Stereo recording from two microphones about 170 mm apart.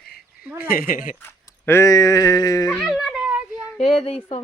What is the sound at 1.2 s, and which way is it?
Speech, 15° left (ahead or behind).